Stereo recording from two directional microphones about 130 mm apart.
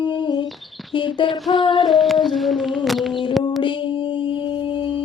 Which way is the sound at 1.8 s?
Centre (ahead or behind).